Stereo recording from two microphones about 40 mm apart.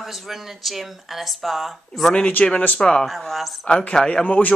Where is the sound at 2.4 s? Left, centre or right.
Left.